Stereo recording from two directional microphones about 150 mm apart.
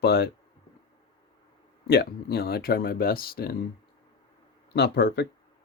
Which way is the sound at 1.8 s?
90° left.